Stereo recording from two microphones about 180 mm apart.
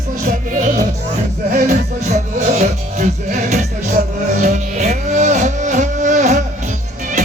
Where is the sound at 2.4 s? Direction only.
40° right (ahead or behind).